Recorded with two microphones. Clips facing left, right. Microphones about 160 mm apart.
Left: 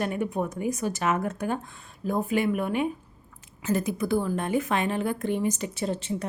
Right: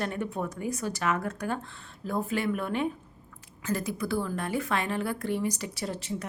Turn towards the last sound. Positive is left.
turn(degrees=25)  # may be behind; listen again after turning